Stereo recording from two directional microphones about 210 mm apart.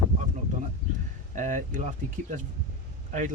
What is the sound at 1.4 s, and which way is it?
Speech, 40° right (ahead or behind).